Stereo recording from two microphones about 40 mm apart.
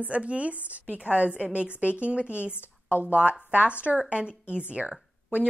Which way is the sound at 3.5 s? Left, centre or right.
Right.